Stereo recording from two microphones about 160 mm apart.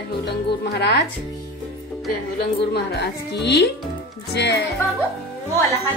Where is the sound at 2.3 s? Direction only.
90° left.